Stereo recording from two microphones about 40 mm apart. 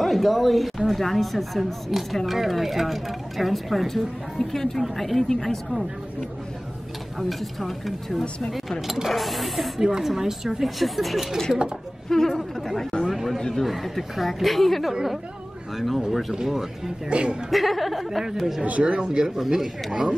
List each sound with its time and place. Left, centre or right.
0.0 s speech: centre
7.2 s speech: centre
8.2 s speech: centre
8.8 s speech: centre
13.4 s speech: centre
13.7 s speech: centre
16.1 s speech: centre
17.1 s speech: right
17.5 s speech: centre
18.6 s speech: right
19.0 s speech: centre
19.9 s speech: right